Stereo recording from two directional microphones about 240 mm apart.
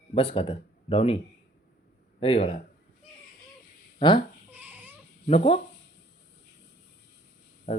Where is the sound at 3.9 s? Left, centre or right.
Centre.